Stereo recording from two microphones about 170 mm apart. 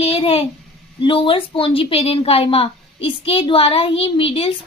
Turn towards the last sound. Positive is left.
turn(degrees=35)  # may be behind; listen again after turning